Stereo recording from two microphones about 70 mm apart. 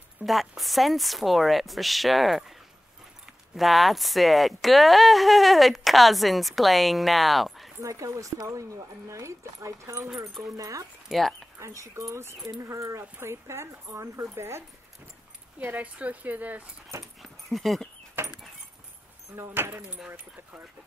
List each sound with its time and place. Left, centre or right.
0.2 s speech: centre
3.5 s speech: centre
7.8 s speech: right
11.1 s speech: centre
11.6 s speech: right
13.8 s speech: right
14.3 s speech: right
15.6 s speech: right
17.0 s dog: centre
19.3 s speech: right